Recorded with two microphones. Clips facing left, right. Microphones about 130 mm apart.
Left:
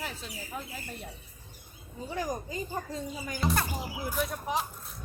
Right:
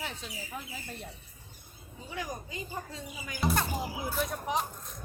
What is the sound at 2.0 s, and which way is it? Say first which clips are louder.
Speech: left 5 dB; 40° left (ahead or behind).